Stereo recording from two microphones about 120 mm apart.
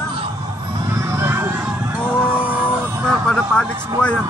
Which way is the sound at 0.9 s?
25° right (ahead or behind).